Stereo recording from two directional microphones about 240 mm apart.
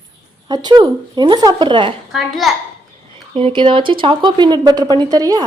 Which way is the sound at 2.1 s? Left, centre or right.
Centre.